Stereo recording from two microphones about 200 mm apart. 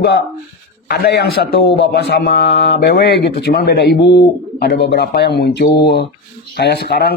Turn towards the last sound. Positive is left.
turn(degrees=55)  # may be behind; listen again after turning